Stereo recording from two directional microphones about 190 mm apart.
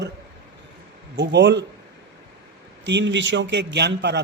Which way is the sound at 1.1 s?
65° right (ahead or behind).